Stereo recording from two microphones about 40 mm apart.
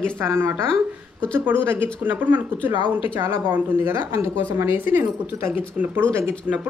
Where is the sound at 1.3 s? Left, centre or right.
Right.